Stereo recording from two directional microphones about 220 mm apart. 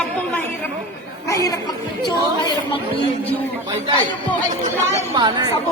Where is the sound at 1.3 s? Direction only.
15° left (ahead or behind).